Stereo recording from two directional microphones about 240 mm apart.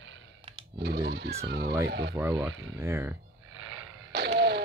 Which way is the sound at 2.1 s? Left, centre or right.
Centre.